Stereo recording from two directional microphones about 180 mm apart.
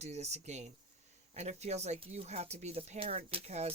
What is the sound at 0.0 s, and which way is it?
Speech, 40° right (ahead or behind).